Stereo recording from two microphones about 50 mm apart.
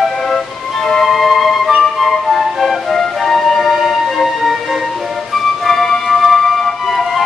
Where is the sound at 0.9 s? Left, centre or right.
Centre.